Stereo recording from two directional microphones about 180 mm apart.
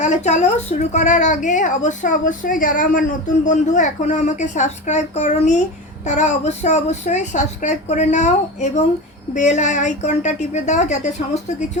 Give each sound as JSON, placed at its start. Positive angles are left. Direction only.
{"t": 0.0, "sound": "a woman's voice", "side_deg": 40}